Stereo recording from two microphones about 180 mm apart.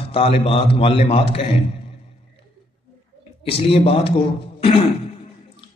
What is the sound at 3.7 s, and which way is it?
Speech, 30° left (ahead or behind).